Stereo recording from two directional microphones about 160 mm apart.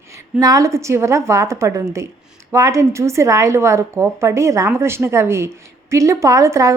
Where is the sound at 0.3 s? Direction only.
20° right (ahead or behind).